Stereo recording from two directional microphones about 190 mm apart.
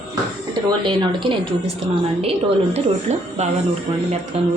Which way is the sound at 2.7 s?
35° right (ahead or behind).